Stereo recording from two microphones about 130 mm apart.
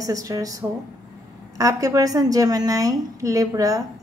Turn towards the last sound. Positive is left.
turn(degrees=-25)  # may be behind; listen again after turning